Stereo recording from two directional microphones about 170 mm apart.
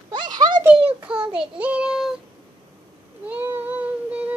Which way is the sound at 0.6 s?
5° right (ahead or behind).